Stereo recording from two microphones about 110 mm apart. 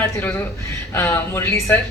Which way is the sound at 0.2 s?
20° left (ahead or behind).